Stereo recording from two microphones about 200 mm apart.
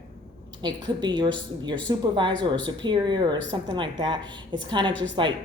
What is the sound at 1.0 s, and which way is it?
A woman's voice, 20° right (ahead or behind).